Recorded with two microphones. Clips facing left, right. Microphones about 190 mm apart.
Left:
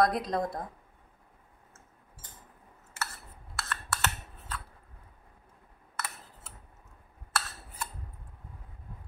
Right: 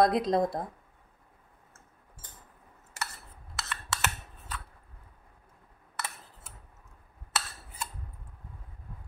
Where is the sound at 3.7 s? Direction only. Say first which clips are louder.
Even; 5° right (ahead or behind).